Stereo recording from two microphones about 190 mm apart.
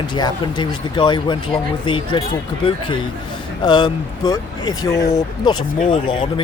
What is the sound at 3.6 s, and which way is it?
Speech, 25° left (ahead or behind).